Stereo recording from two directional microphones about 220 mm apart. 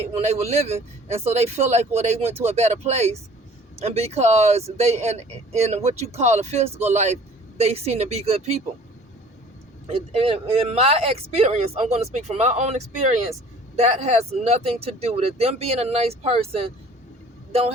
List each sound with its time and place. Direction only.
0.1 s speech: 30° right (ahead or behind)
10.1 s speech: 25° right (ahead or behind)